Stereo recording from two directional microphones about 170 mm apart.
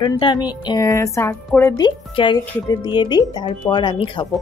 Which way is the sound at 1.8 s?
25° left (ahead or behind).